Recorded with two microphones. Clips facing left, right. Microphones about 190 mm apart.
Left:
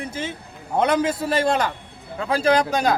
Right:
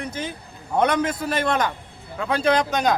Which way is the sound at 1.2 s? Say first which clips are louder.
Left 2 dB; 30° left (ahead or behind).